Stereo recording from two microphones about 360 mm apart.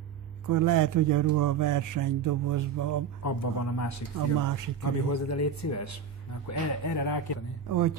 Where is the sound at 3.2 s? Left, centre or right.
Left.